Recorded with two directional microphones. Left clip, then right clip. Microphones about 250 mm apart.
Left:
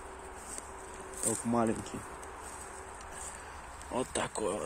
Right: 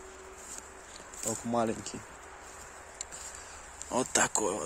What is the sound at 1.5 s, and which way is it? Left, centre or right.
Speech, right.